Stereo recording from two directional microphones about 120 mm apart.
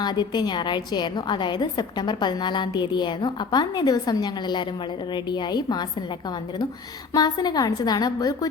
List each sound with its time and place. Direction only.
0.0 s a woman's voice: 35° left (ahead or behind)
7.1 s a woman's voice: 35° left (ahead or behind)